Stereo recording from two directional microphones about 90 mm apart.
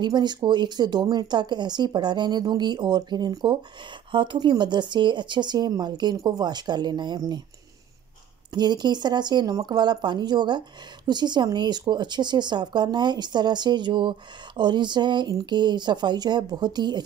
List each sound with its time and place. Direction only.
0.0 s speech: 55° right (ahead or behind)
4.1 s speech: 65° right (ahead or behind); by 7.4 s 50° right (ahead or behind)
8.5 s speech: 55° right (ahead or behind)